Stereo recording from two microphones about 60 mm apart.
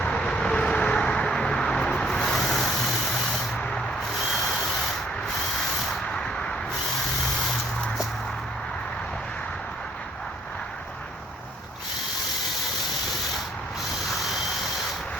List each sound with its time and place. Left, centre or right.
0.0 s vehicle: centre
3.6 s rub: centre
4.3 s rub: centre
5.9 s vehicle: centre